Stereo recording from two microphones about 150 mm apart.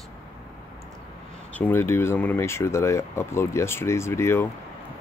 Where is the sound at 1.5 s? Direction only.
15° left (ahead or behind).